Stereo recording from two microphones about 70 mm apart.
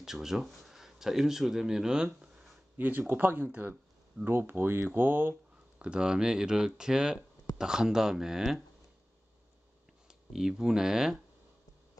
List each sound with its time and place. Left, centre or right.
0.0 s speech: centre
2.8 s speech: right
5.8 s speech: centre
10.0 s speech: centre